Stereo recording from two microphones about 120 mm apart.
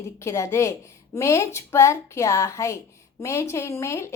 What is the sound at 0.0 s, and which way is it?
A woman's voice, 25° left (ahead or behind).